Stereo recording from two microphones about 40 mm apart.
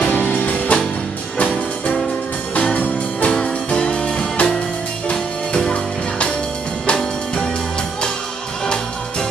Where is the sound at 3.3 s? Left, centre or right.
Centre.